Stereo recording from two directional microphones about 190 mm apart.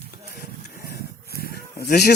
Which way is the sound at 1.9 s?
60° left (ahead or behind).